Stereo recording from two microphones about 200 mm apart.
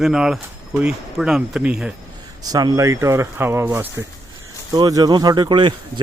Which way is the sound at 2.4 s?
20° right (ahead or behind).